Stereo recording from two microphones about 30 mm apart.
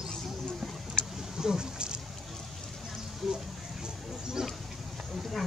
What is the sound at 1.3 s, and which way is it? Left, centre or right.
Speech, right.